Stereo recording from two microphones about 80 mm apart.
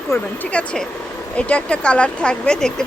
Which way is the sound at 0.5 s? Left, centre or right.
Centre.